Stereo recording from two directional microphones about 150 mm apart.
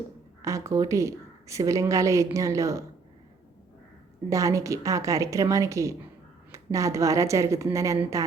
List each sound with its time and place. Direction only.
0.4 s a woman's voice: 20° right (ahead or behind)
4.3 s a woman's voice: 20° right (ahead or behind)